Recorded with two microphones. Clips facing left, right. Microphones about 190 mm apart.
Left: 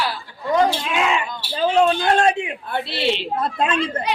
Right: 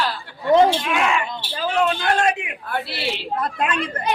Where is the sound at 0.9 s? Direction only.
20° left (ahead or behind).